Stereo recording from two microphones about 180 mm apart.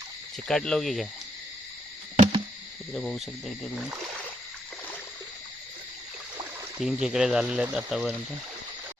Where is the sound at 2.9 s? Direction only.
Centre (ahead or behind).